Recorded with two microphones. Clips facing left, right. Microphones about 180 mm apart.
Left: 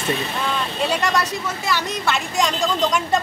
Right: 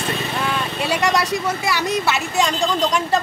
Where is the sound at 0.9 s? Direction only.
10° right (ahead or behind).